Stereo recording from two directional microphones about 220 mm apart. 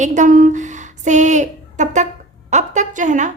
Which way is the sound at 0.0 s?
35° right (ahead or behind).